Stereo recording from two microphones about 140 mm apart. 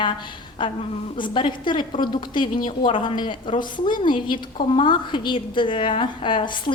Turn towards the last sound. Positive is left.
turn(degrees=35)  # may be behind; listen again after turning